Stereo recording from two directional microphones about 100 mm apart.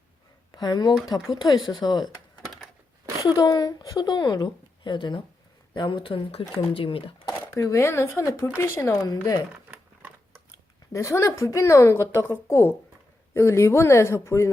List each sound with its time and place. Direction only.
0.5 s speech: 45° left (ahead or behind)
2.4 s a sound: centre (ahead or behind)
3.2 s a woman's voice: 40° left (ahead or behind); by 7.0 s 65° left (ahead or behind)
7.5 s a woman's voice: 30° left (ahead or behind)
8.9 s speech: 40° left (ahead or behind)
10.9 s a woman's voice: 30° left (ahead or behind)